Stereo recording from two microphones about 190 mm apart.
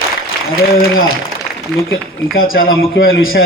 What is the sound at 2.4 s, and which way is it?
Speech, 50° left (ahead or behind).